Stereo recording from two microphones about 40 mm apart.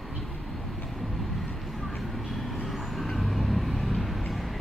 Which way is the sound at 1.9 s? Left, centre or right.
Centre.